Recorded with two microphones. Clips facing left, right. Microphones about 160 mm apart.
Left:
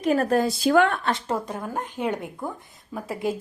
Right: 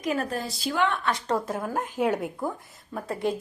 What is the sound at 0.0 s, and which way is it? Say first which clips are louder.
Speech: left 6 dB; 35° left (ahead or behind).